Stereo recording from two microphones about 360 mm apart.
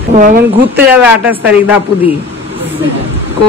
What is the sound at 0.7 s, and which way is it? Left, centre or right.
A woman's voice, centre.